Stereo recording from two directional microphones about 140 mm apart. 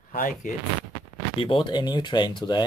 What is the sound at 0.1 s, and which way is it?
Speech, 80° left.